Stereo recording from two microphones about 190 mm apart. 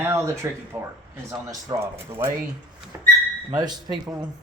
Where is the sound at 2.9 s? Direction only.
10° right (ahead or behind).